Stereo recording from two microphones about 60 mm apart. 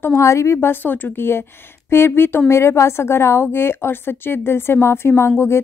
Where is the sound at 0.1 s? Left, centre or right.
Left.